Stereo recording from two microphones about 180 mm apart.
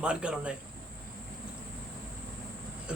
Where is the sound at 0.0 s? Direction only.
5° right (ahead or behind).